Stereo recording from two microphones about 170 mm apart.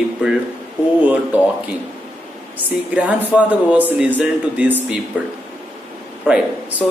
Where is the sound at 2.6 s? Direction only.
10° right (ahead or behind).